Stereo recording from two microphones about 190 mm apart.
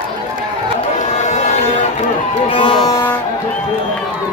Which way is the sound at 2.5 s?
25° left (ahead or behind).